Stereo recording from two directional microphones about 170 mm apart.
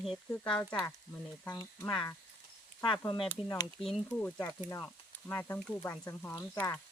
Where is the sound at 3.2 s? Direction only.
15° left (ahead or behind).